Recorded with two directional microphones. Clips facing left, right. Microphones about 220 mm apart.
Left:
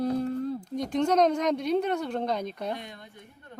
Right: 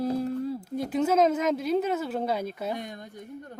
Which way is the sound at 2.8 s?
45° right (ahead or behind).